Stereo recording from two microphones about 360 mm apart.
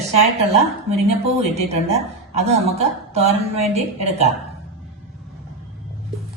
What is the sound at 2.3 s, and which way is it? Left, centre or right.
A woman's voice, centre.